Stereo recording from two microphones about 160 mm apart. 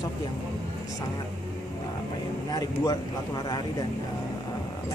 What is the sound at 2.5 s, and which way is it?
Speech, 25° left (ahead or behind).